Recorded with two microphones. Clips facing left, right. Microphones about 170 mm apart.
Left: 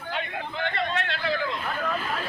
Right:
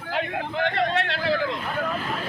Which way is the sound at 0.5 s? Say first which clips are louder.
Right 5 dB; 75° right (ahead or behind).